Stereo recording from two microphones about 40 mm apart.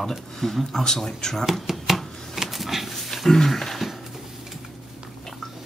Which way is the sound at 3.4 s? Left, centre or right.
Centre.